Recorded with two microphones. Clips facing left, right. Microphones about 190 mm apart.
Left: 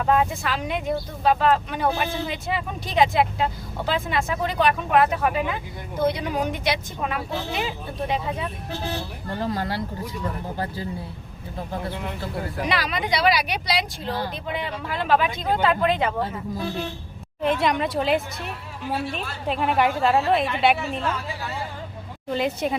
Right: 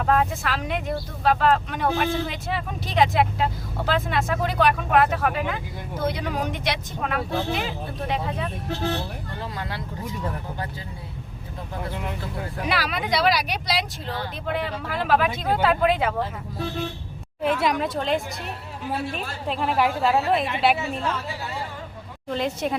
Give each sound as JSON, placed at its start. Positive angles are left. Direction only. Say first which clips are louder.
{"t": 0.0, "sound": "speech", "louder": "left 1 dB", "side_deg": 0}
{"t": 9.4, "sound": "speech", "louder": "left 8 dB", "side_deg": 35}
{"t": 12.6, "sound": "speech", "louder": "right 1 dB", "side_deg": -5}
{"t": 17.4, "sound": "speech", "louder": "left 1 dB", "side_deg": -5}
{"t": 19.5, "sound": "speech", "louder": "left 1 dB", "side_deg": 0}
{"t": 22.3, "sound": "speech", "louder": "left 1 dB", "side_deg": 0}